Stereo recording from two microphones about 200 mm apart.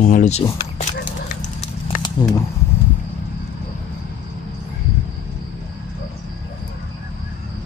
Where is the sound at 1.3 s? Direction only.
40° left (ahead or behind).